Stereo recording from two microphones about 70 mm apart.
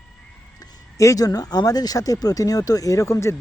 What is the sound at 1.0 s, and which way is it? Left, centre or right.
Speech, left.